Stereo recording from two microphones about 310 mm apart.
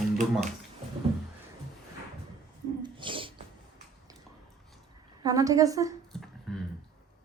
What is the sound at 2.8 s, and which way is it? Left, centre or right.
Sneeze, centre.